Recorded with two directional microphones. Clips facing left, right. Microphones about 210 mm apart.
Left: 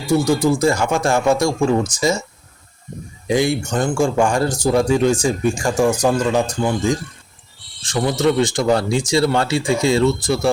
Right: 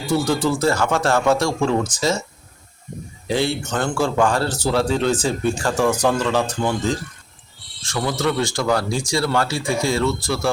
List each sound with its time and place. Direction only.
0.1 s speech: 10° left (ahead or behind)
3.2 s speech: 15° left (ahead or behind)